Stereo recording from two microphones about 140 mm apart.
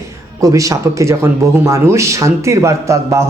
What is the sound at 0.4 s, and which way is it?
Speech, 25° right (ahead or behind).